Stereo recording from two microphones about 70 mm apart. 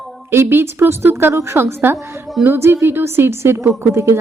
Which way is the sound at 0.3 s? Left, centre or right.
Right.